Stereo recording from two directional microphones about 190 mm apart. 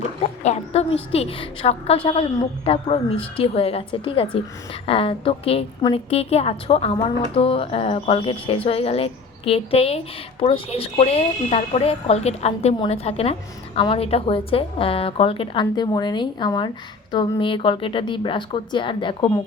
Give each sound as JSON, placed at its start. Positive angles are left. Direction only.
{"t": 0.2, "sound": "a woman's voice", "side_deg": 35}